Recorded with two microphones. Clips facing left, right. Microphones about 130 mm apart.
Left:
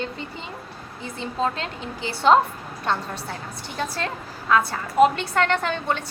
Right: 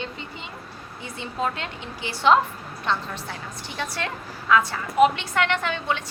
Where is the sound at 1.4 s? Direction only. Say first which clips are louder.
Left 2 dB; 30° left (ahead or behind).